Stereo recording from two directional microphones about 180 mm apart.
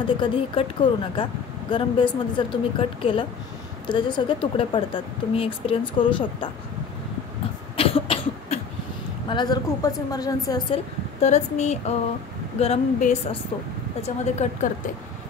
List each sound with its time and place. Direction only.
0.2 s speech: 25° left (ahead or behind)
7.7 s cough: 30° left (ahead or behind)
9.3 s speech: 25° left (ahead or behind)
11.1 s speech: 40° left (ahead or behind)